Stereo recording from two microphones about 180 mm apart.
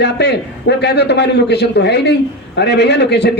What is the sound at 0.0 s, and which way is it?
A man's voice, 70° left (ahead or behind).